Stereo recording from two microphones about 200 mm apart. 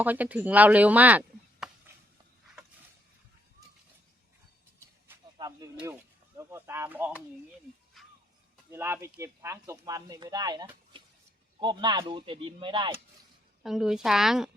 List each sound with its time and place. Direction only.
0.0 s speech: 10° right (ahead or behind)
5.0 s a sound: 15° right (ahead or behind)
8.0 s music: centre (ahead or behind)
8.7 s speech: 10° right (ahead or behind)
13.6 s a woman's voice: centre (ahead or behind)